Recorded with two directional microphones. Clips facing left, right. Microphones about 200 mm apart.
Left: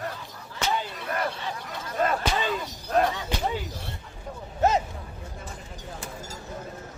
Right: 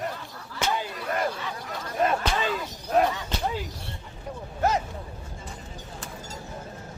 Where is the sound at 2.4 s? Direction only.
Centre (ahead or behind).